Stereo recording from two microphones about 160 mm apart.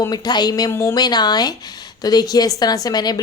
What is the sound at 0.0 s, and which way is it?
A woman's voice, 25° left (ahead or behind).